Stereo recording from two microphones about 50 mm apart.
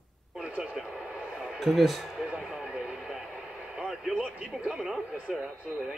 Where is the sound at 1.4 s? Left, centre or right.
Centre.